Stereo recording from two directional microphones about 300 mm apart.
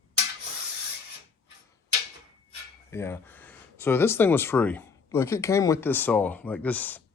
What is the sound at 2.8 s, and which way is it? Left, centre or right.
Speech, centre.